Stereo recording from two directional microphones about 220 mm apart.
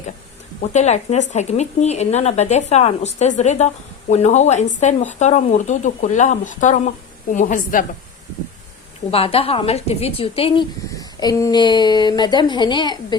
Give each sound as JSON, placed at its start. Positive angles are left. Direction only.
{"t": 0.6, "sound": "speech", "side_deg": 30}
{"t": 9.0, "sound": "a woman's voice", "side_deg": 25}